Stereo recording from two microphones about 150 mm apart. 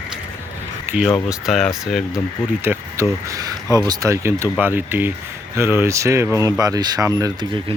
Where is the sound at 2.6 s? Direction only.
15° right (ahead or behind).